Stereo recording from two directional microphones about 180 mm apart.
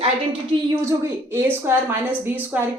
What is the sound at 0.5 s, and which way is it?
A woman's voice, 25° right (ahead or behind).